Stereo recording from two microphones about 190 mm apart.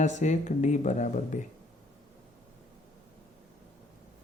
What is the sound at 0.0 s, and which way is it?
Speech, 40° left (ahead or behind).